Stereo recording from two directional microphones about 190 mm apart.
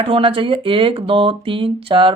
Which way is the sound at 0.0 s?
30° right (ahead or behind).